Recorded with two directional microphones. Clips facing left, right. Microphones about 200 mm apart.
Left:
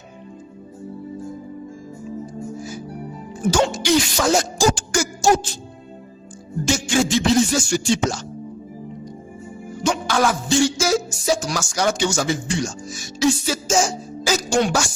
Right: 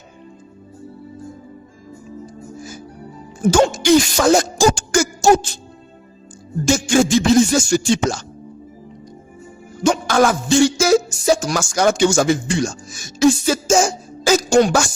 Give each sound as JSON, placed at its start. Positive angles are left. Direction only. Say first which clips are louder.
{"t": 3.5, "sound": "music", "louder": "right 5 dB", "side_deg": -50}
{"t": 6.7, "sound": "speech", "louder": "right 5 dB", "side_deg": -45}
{"t": 9.8, "sound": "music", "louder": "right 5 dB", "side_deg": -45}
{"t": 10.8, "sound": "speech", "louder": "right 6 dB", "side_deg": -55}